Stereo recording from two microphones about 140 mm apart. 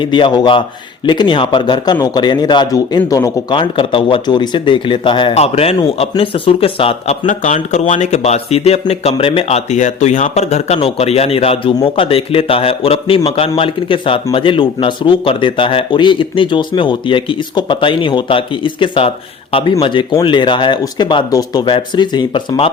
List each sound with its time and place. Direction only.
0.0 s speech: 35° left (ahead or behind)
3.5 s speech: 35° left (ahead or behind)
5.3 s speech: 45° left (ahead or behind)
7.3 s speech: 60° left (ahead or behind); by 22.7 s 40° left (ahead or behind)